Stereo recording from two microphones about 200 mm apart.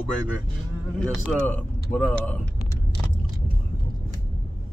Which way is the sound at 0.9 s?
5° left (ahead or behind).